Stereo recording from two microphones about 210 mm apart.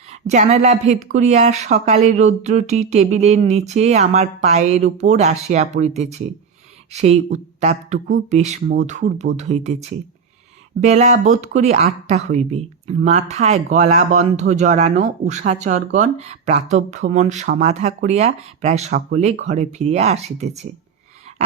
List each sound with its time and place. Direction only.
0.1 s speech: 35° right (ahead or behind)
10.8 s speech: 35° right (ahead or behind)